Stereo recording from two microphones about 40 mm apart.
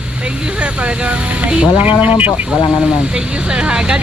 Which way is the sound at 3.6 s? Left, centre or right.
Right.